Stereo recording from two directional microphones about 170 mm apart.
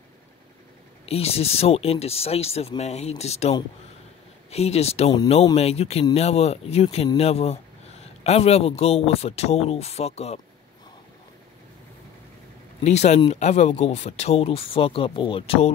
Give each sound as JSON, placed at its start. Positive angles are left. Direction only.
{"t": 1.0, "sound": "speech", "side_deg": 35}
{"t": 12.8, "sound": "speech", "side_deg": 40}